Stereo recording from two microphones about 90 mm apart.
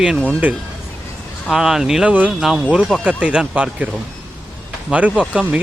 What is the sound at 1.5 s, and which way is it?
Speech, 5° right (ahead or behind).